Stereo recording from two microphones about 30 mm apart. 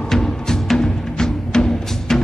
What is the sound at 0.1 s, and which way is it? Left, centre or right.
Music, centre.